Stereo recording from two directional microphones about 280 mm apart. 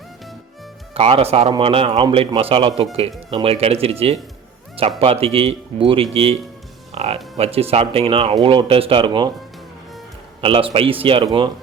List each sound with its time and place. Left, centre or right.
0.9 s speech: right
4.9 s speech: right
10.4 s speech: centre